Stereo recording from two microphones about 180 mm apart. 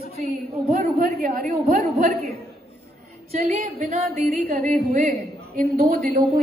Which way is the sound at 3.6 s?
40° right (ahead or behind).